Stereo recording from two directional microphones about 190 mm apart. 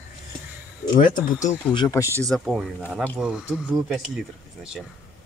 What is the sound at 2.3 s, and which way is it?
Speech, centre (ahead or behind).